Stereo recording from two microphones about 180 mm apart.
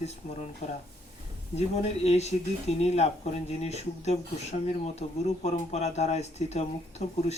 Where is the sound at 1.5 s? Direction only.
35° left (ahead or behind).